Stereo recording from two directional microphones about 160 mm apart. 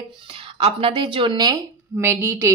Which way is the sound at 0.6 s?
35° right (ahead or behind).